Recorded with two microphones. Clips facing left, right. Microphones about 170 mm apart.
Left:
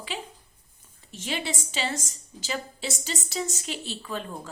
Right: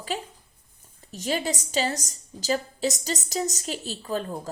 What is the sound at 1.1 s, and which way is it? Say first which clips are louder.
A woman's voice: right 5 dB; 40° right (ahead or behind).